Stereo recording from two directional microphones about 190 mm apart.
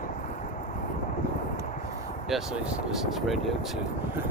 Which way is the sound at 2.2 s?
Centre (ahead or behind).